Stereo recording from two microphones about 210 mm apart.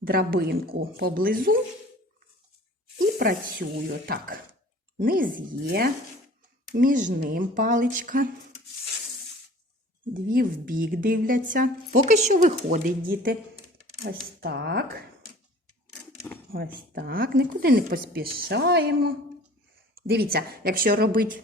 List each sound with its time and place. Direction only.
0.0 s speech: 45° right (ahead or behind)
3.2 s a woman's voice: 45° right (ahead or behind)
10.2 s a woman's voice: 40° right (ahead or behind)
16.2 s a sound: 10° left (ahead or behind)
16.7 s speech: 45° right (ahead or behind)